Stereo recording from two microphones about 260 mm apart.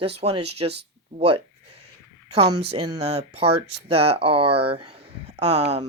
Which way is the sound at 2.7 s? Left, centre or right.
Right.